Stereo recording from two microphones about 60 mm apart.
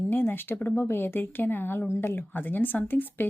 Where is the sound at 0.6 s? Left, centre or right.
Left.